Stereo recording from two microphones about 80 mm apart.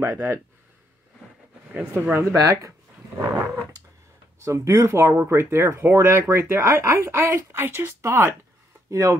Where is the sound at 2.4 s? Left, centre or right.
Right.